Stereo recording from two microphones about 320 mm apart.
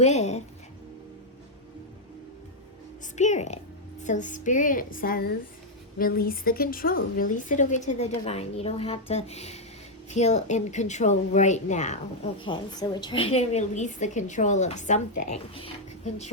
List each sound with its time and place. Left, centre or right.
0.0 s a woman's voice: left
3.2 s a woman's voice: left